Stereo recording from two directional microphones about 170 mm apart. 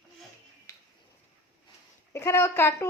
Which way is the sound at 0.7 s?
15° left (ahead or behind).